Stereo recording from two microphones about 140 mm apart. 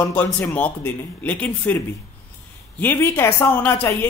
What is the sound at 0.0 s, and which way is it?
Speech, 15° left (ahead or behind).